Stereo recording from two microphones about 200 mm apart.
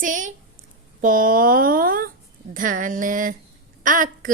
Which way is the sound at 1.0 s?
45° right (ahead or behind).